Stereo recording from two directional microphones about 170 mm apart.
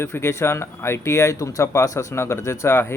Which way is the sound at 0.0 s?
15° left (ahead or behind).